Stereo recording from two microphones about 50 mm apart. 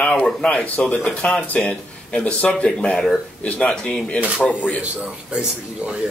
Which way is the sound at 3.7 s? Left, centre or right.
Centre.